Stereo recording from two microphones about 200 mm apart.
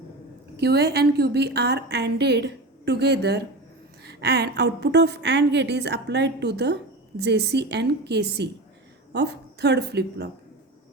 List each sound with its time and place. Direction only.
0.5 s a woman's voice: 55° right (ahead or behind)